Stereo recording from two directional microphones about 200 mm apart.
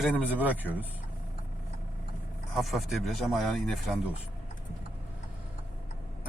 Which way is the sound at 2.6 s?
Centre (ahead or behind).